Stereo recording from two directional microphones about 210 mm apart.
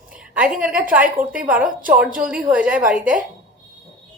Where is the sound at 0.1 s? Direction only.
5° right (ahead or behind).